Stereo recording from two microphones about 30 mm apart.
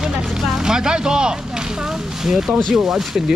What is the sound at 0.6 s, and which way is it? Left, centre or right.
A man's voice, right.